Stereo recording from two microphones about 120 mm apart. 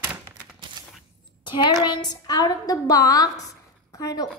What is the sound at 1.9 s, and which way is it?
A woman's voice, 35° left (ahead or behind).